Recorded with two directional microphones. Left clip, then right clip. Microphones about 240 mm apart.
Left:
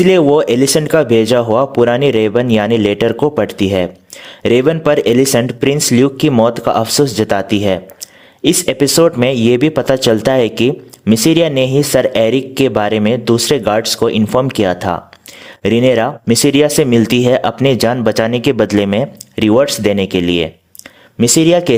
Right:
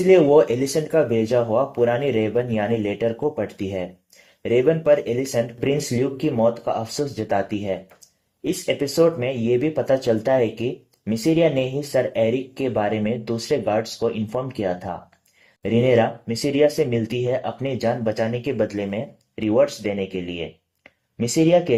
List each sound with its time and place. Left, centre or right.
0.1 s speech: left